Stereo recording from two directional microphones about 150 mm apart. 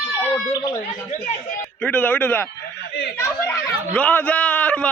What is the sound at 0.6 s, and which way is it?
Speech, 25° left (ahead or behind).